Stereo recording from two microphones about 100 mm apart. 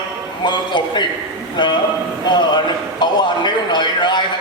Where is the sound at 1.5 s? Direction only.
50° left (ahead or behind).